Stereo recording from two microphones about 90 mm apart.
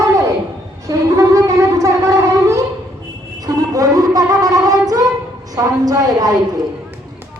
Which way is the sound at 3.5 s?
40° right (ahead or behind).